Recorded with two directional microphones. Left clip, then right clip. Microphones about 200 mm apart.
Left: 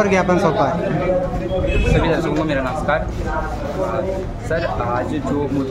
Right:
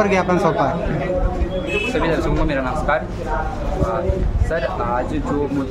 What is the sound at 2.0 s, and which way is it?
Speech, 5° right (ahead or behind).